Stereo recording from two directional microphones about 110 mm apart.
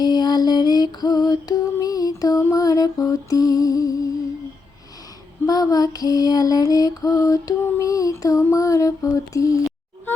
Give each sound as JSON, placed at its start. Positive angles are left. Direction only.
{"t": 0.0, "sound": "music", "side_deg": 40}
{"t": 5.5, "sound": "lullaby", "side_deg": 35}